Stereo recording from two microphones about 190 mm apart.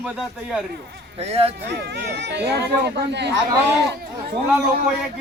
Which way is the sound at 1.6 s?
60° right (ahead or behind).